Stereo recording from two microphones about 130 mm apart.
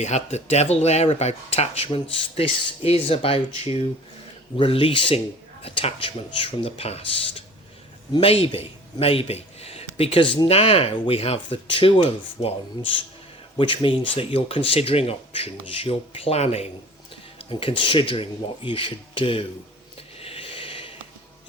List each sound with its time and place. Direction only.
0.0 s a man's voice: 60° left (ahead or behind)
17.3 s speech: 45° left (ahead or behind)
20.1 s snort: 50° left (ahead or behind)